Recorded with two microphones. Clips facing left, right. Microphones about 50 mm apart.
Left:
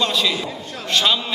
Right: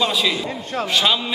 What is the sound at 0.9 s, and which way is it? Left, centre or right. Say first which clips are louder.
Speech: left 1 dB; centre.